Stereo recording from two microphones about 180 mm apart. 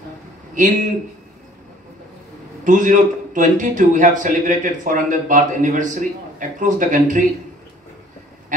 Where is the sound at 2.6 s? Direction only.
45° right (ahead or behind).